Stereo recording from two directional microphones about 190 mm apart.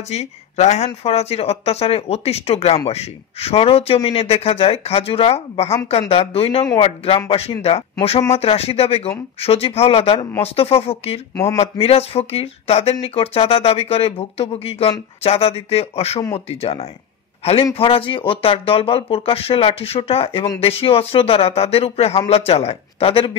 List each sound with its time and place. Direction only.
0.1 s speech: 35° left (ahead or behind)